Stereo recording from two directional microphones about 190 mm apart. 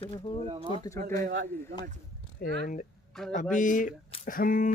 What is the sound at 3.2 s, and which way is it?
Speech, 5° left (ahead or behind).